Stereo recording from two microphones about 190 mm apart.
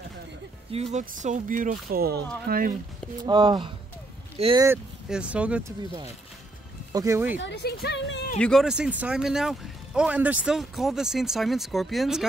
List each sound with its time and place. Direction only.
0.7 s speech: 35° right (ahead or behind)
3.3 s speech: 25° right (ahead or behind)
5.1 s speech: 5° right (ahead or behind)
6.9 s speech: 15° right (ahead or behind)
7.3 s speech: 65° left (ahead or behind)
8.4 s speech: centre (ahead or behind)